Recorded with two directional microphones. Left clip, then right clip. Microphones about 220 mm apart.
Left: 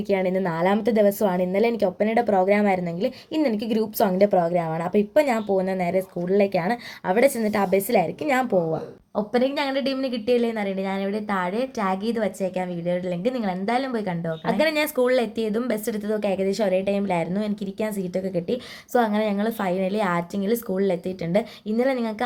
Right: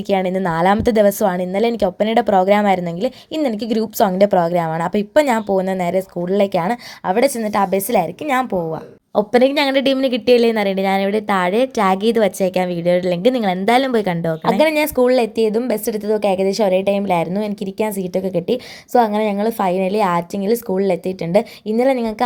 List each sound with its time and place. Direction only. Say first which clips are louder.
0.1 s a woman's voice: right 5 dB; 35° right (ahead or behind)
9.1 s a woman's voice: right 9 dB; 35° right (ahead or behind)